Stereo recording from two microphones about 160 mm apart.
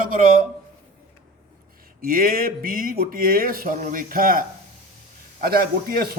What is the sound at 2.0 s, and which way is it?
Speech, 65° right (ahead or behind).